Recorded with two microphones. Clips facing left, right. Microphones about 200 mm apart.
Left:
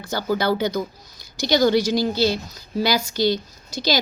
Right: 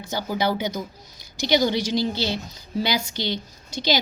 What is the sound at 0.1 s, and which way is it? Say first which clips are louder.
A woman's voice: left 3 dB; 15° right (ahead or behind).